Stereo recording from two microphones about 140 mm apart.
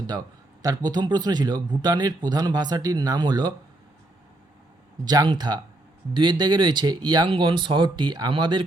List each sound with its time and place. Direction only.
0.6 s speech: 25° right (ahead or behind)
5.0 s speech: 30° right (ahead or behind)